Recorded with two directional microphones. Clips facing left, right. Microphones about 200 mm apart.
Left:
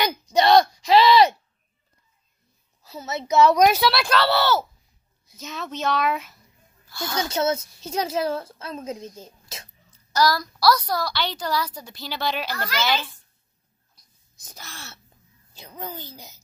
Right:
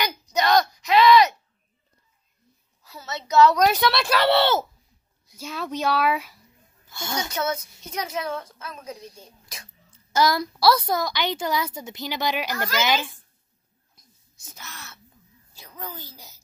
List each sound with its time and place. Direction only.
0.0 s a sound: 30° left (ahead or behind)
2.9 s a woman's voice: 20° left (ahead or behind)
3.7 s speech: centre (ahead or behind)
4.3 s a woman's voice: 25° right (ahead or behind)
5.4 s a child's voice: 10° right (ahead or behind)
6.9 s a woman's voice: 25° right (ahead or behind)
7.2 s a woman's voice: 25° left (ahead or behind)
9.8 s a woman's voice: 25° right (ahead or behind)
14.4 s a woman's voice: 35° left (ahead or behind)